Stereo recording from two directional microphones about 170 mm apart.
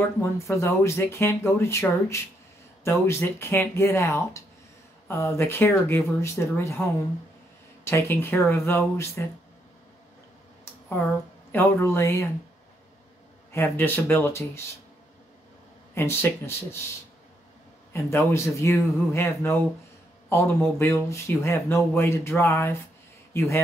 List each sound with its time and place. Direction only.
0.4 s speech: 15° left (ahead or behind)
7.8 s speech: 15° left (ahead or behind)
11.5 s speech: 15° left (ahead or behind)
13.5 s speech: 15° left (ahead or behind)
15.9 s speech: 15° left (ahead or behind)
17.9 s speech: 15° left (ahead or behind)